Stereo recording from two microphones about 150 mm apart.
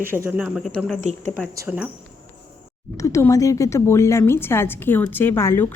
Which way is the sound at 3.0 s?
20° left (ahead or behind).